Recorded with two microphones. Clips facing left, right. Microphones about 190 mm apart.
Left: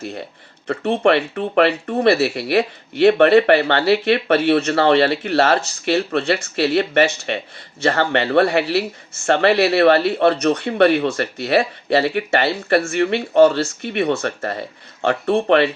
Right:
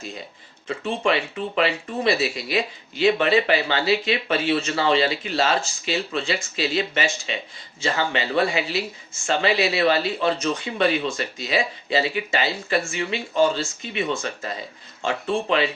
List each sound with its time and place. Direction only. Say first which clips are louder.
0.7 s speech: left 7 dB; 65° left (ahead or behind)